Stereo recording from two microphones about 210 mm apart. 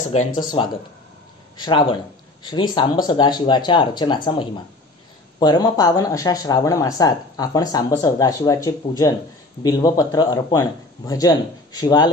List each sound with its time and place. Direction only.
0.3 s speech: 20° left (ahead or behind)